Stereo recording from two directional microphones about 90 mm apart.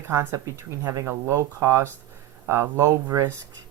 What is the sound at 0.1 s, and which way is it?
Speech, 30° right (ahead or behind).